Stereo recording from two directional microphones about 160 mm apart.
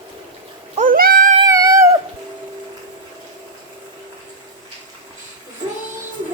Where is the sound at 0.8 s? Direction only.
65° right (ahead or behind).